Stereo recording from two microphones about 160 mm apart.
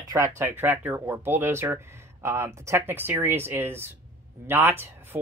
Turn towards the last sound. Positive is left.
turn(degrees=-15)  # may be behind; listen again after turning